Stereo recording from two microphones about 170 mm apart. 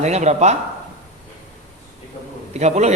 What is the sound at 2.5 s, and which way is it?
Speech, 40° right (ahead or behind).